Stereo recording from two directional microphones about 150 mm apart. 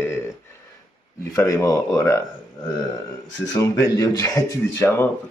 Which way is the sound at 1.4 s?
20° left (ahead or behind).